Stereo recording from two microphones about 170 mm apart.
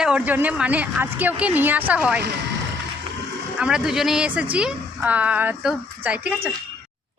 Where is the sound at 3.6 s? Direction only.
5° right (ahead or behind).